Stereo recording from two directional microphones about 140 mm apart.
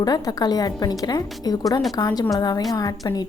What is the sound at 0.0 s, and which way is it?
A woman's voice, 30° left (ahead or behind).